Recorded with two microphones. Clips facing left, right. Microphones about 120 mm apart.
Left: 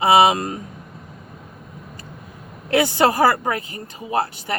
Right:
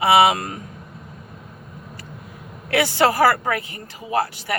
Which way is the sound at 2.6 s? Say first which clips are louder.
Left 1 dB; 25° left (ahead or behind).